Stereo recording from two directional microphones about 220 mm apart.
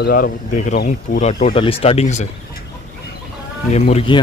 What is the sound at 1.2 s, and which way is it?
Speech, 25° left (ahead or behind).